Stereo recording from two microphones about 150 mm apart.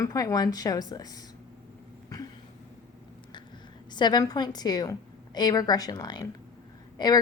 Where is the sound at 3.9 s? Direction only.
30° left (ahead or behind).